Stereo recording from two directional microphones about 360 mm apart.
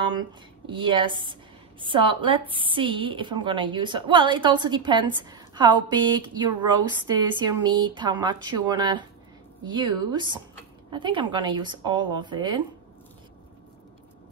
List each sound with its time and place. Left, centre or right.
0.0 s a woman's voice: centre